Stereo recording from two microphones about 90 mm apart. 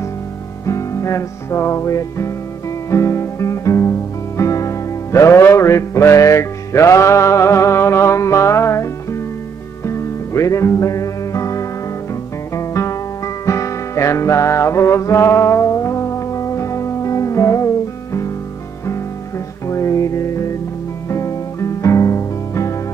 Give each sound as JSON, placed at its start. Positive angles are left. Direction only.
{"t": 0.7, "sound": "music", "side_deg": 35}
{"t": 19.7, "sound": "music", "side_deg": 35}